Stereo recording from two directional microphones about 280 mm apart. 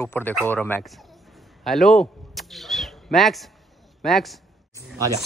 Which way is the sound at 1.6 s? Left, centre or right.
Centre.